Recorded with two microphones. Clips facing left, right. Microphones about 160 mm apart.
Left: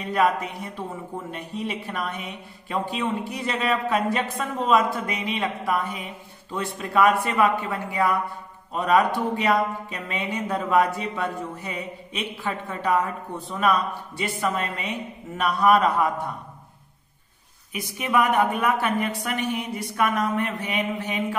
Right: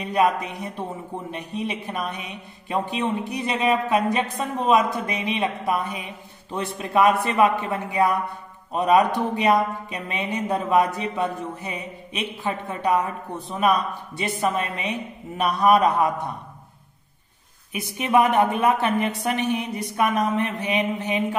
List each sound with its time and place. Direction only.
0.1 s a man's voice: 20° right (ahead or behind)
17.7 s a man's voice: 25° right (ahead or behind)